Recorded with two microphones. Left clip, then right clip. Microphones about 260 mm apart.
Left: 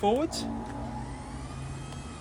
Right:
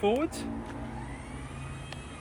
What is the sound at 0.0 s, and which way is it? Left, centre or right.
Speech, centre.